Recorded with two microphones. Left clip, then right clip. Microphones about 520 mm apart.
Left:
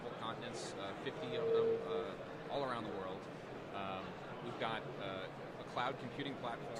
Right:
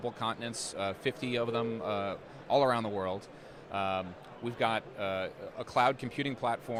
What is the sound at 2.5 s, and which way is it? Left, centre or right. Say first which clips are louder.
Speech: right 14 dB; right.